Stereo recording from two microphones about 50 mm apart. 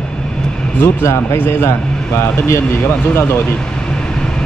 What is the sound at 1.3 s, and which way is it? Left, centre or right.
Speech, left.